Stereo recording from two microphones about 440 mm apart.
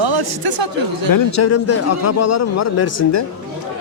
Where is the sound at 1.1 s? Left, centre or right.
Left.